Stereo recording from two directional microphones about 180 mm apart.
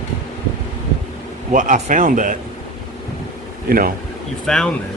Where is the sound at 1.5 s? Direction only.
45° right (ahead or behind).